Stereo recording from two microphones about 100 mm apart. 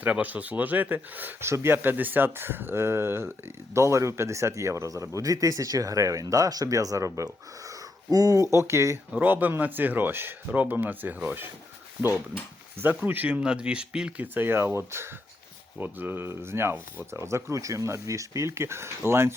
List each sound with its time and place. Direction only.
0.0 s speech: 15° right (ahead or behind)
9.1 s speech: 15° right (ahead or behind)
12.7 s speech: 20° right (ahead or behind)
14.3 s speech: 20° right (ahead or behind)